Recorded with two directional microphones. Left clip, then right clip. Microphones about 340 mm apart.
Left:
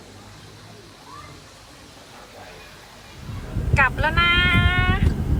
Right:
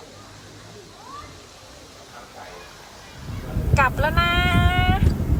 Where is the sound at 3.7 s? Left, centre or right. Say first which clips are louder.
Left 1 dB; centre.